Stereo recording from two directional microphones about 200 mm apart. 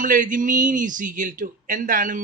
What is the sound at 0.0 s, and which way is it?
Speech, 40° right (ahead or behind).